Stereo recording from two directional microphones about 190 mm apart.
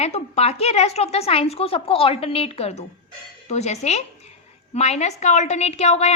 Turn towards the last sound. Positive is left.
turn(degrees=35)  # may be behind; listen again after turning